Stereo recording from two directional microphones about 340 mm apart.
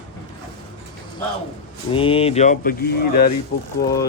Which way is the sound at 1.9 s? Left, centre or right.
Centre.